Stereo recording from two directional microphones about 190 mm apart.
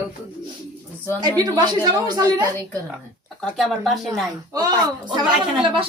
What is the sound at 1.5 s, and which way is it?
A woman's voice, 20° right (ahead or behind).